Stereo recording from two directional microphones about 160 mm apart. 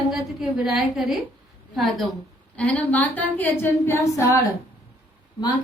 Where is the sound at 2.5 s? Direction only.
10° left (ahead or behind).